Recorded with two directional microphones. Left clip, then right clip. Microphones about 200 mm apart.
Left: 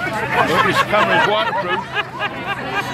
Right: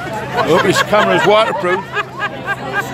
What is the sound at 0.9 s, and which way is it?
Speech, 55° right (ahead or behind).